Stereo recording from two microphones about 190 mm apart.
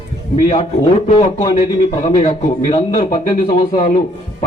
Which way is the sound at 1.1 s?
25° left (ahead or behind).